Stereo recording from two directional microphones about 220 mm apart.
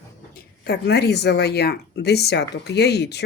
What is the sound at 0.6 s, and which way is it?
Speech, 50° left (ahead or behind).